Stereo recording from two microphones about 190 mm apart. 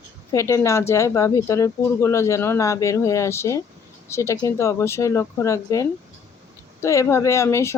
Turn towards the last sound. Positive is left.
turn(degrees=15)  # may be behind; listen again after turning